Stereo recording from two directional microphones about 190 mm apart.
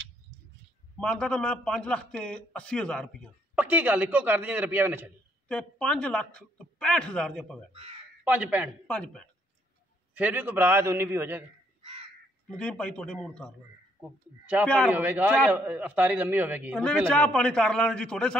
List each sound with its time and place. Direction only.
0.9 s a man's voice: 5° left (ahead or behind)
3.5 s a man's voice: 10° right (ahead or behind)
5.5 s a man's voice: 5° left (ahead or behind)
8.2 s speech: 5° right (ahead or behind)
8.8 s a man's voice: 5° left (ahead or behind)
10.1 s a man's voice: 10° right (ahead or behind)
11.8 s crow: 30° right (ahead or behind)
12.4 s a man's voice: 5° left (ahead or behind)
14.4 s a man's voice: 5° right (ahead or behind)
16.7 s a man's voice: 5° left (ahead or behind)